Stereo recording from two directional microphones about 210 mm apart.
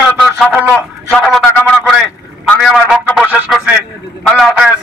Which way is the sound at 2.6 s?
Centre (ahead or behind).